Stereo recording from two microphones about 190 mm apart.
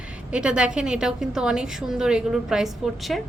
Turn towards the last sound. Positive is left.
turn(degrees=0)  # may be behind; listen again after turning